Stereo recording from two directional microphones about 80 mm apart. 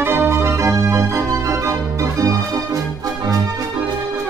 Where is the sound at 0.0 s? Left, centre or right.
Right.